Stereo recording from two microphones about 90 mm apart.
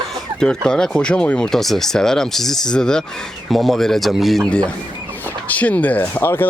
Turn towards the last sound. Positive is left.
turn(degrees=25)  # may be behind; listen again after turning